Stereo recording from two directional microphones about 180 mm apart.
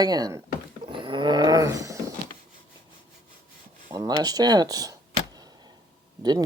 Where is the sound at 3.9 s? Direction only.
20° right (ahead or behind).